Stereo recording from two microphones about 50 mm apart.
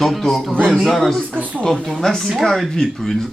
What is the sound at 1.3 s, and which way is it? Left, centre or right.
Speech, right.